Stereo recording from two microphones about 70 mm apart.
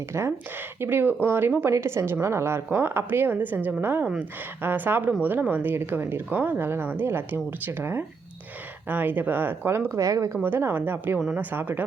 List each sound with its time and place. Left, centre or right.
0.1 s speech: right
0.8 s speech: right
1.7 s speech: right
9.9 s speech: right
10.4 s speech: right